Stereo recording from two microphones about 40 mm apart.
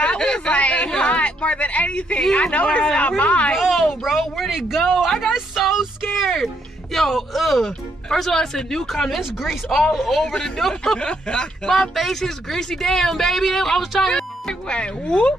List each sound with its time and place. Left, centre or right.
0.2 s a sound: left
2.3 s speech: left
3.7 s a sound: centre
4.5 s speech: centre
5.0 s a sound: centre
6.3 s speech: centre
8.1 s speech: centre
10.2 s speech: centre
11.7 s speech: centre
14.1 s speech: left